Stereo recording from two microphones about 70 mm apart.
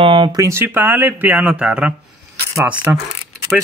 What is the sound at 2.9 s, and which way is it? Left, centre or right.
Speech, right.